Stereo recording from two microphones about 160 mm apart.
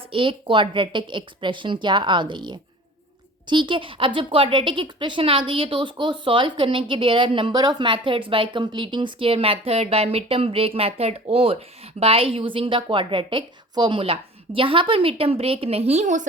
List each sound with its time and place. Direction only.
0.1 s speech: 35° right (ahead or behind)